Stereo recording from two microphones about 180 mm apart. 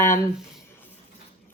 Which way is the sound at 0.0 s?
15° left (ahead or behind).